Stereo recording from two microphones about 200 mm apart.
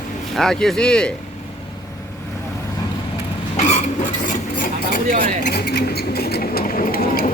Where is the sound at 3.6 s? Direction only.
35° left (ahead or behind).